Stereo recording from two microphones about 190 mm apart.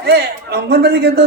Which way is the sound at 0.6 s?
60° right (ahead or behind).